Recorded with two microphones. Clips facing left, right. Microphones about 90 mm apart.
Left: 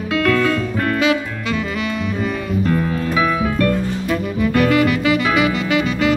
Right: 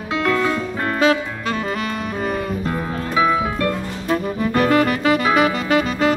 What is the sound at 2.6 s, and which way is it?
Music, 25° right (ahead or behind).